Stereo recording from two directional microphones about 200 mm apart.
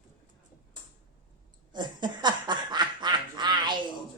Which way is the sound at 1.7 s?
20° right (ahead or behind).